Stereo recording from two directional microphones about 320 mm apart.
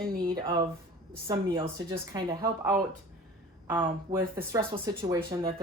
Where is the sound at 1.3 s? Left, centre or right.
Centre.